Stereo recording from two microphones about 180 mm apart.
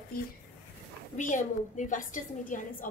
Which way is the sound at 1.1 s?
45° left (ahead or behind).